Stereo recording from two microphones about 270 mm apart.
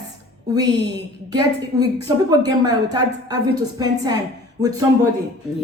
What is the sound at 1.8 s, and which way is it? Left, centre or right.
A woman's voice, centre.